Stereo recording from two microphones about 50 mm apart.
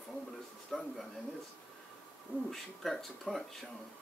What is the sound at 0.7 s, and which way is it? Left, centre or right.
Speech, centre.